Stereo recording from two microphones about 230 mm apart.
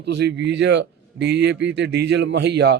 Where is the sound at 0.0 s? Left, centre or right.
Right.